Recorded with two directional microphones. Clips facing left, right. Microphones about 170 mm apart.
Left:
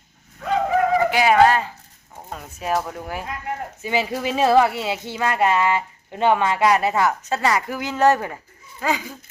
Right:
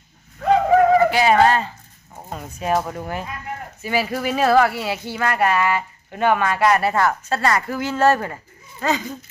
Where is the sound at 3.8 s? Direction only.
20° left (ahead or behind).